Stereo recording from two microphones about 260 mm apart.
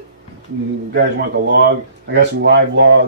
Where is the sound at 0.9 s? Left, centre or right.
Right.